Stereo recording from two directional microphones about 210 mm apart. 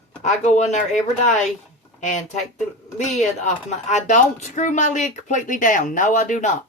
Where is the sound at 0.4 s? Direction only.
35° left (ahead or behind).